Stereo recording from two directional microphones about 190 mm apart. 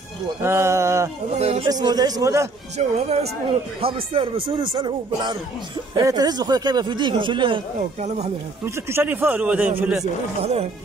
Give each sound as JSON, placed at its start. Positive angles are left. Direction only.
{"t": 0.4, "sound": "speech", "side_deg": -15}
{"t": 1.4, "sound": "speech", "side_deg": -30}
{"t": 1.7, "sound": "speech", "side_deg": -20}
{"t": 2.8, "sound": "speech", "side_deg": -40}
{"t": 8.6, "sound": "speech", "side_deg": -10}
{"t": 10.4, "sound": "speech", "side_deg": -30}